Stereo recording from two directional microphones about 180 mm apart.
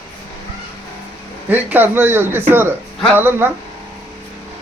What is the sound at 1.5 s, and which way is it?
A man's voice, 10° right (ahead or behind).